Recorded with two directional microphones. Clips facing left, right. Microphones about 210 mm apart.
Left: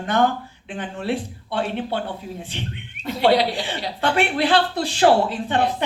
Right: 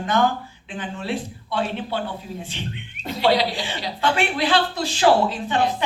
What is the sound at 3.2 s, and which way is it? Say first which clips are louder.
A man's voice: left 2 dB; 60° left (ahead or behind).